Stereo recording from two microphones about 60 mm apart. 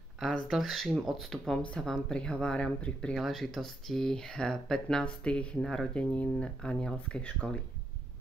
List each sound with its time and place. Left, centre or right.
0.2 s speech: centre
3.2 s speech: centre